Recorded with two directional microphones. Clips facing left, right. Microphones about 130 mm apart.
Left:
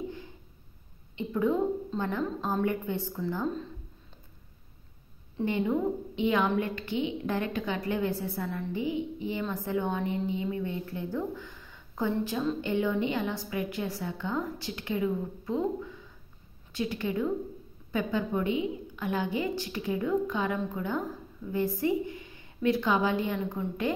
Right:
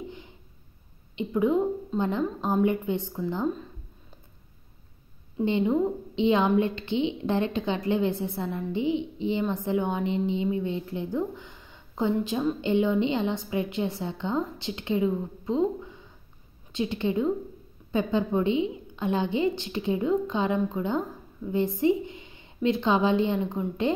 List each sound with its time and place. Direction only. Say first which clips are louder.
1.1 s a woman's voice: right 4 dB; 20° right (ahead or behind)
5.4 s a woman's voice: right 4 dB; 20° right (ahead or behind)